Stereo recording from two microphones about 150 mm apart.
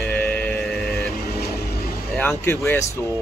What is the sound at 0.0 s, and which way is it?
Music, 10° left (ahead or behind).